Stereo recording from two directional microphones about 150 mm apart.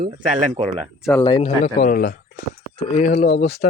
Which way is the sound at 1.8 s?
75° left (ahead or behind).